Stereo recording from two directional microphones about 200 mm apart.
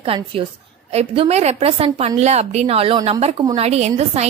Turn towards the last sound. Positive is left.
turn(degrees=-30)  # may be behind; listen again after turning